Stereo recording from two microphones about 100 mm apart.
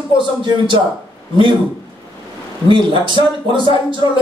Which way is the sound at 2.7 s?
55° right (ahead or behind).